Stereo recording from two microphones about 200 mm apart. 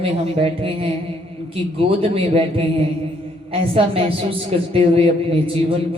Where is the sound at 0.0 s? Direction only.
30° right (ahead or behind).